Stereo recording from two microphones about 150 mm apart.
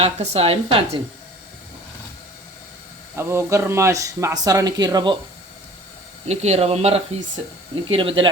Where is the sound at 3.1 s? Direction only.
15° right (ahead or behind).